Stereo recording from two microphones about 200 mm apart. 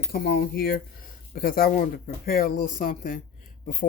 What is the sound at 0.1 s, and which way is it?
A man's voice, 50° left (ahead or behind).